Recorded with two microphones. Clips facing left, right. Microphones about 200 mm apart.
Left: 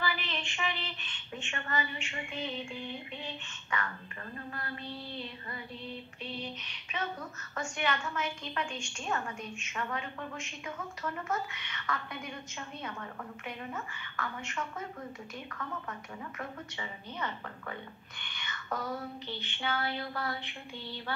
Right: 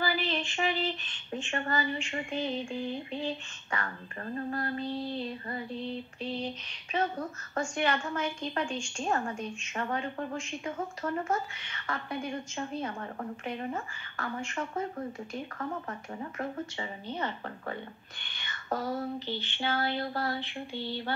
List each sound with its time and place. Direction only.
0.0 s a woman's voice: 35° right (ahead or behind)
6.6 s a woman's voice: 35° right (ahead or behind)
16.2 s a woman's voice: 35° right (ahead or behind)